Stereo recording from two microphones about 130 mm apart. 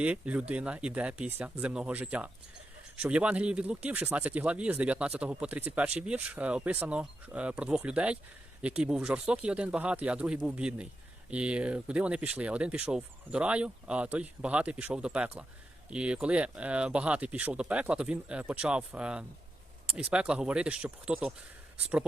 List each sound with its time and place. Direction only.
0.0 s speech: 10° right (ahead or behind)